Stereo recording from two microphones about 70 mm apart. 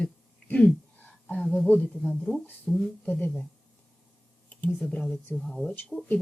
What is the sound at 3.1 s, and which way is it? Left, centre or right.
Speech, left.